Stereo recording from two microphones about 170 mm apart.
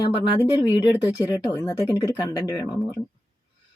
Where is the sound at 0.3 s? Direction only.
25° left (ahead or behind).